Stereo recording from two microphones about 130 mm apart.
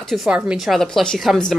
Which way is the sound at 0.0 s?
Centre (ahead or behind).